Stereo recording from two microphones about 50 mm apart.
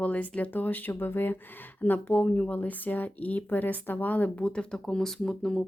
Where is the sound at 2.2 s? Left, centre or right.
Left.